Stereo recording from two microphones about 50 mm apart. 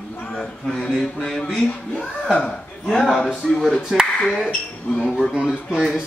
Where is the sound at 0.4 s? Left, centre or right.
Centre.